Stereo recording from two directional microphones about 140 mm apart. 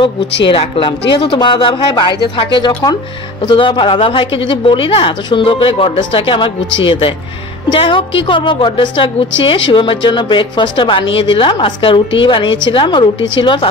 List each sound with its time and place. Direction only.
0.0 s a woman's voice: 40° left (ahead or behind)